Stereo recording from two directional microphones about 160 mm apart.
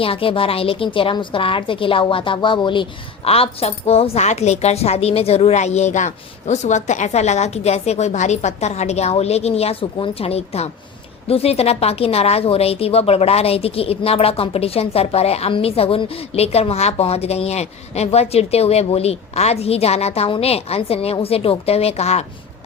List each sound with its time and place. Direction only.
0.0 s a woman's voice: 35° left (ahead or behind)